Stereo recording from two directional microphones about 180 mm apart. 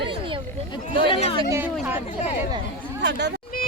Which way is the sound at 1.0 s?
30° left (ahead or behind).